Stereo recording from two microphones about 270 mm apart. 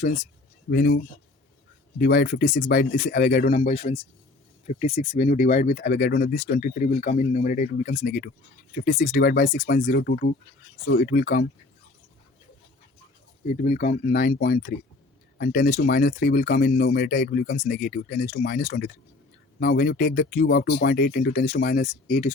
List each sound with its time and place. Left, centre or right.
0.0 s speech: left
2.0 s speech: left
13.5 s speech: left